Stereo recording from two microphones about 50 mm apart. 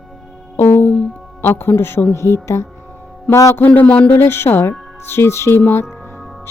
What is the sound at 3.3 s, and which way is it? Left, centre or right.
Speech, left.